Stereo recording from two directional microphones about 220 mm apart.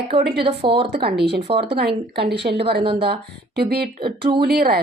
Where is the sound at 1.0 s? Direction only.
50° right (ahead or behind).